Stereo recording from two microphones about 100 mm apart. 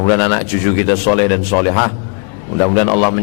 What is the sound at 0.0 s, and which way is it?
A man's voice, 15° left (ahead or behind).